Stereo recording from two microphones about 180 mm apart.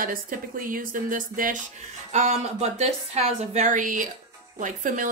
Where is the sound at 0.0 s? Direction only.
50° right (ahead or behind).